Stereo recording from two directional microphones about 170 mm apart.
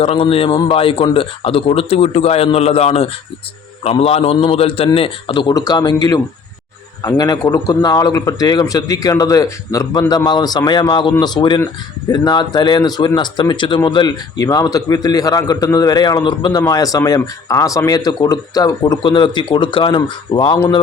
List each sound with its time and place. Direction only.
0.0 s a man's voice: 35° left (ahead or behind)